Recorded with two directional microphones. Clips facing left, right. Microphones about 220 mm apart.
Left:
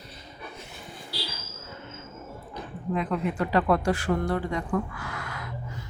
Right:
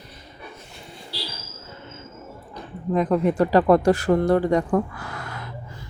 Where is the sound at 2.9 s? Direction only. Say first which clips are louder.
Right 8 dB; 40° right (ahead or behind).